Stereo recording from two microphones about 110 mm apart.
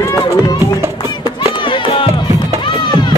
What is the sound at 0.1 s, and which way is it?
Music, 35° left (ahead or behind).